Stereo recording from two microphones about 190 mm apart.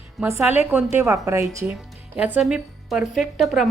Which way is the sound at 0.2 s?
10° right (ahead or behind).